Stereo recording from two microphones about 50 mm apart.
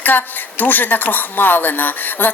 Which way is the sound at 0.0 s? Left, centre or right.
Left.